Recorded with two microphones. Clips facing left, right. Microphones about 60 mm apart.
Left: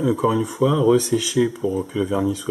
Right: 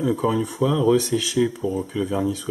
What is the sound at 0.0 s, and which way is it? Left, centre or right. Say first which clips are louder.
Speech: left 2 dB; centre.